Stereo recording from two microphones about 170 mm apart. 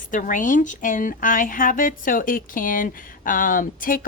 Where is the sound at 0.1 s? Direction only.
50° left (ahead or behind).